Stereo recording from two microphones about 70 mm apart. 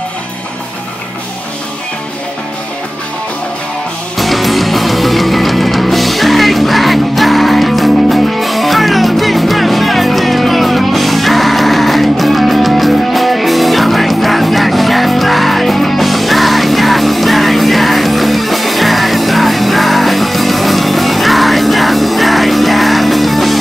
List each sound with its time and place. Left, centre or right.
4.2 s music: centre